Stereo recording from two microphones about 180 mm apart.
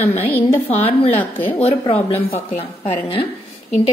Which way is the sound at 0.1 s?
10° left (ahead or behind).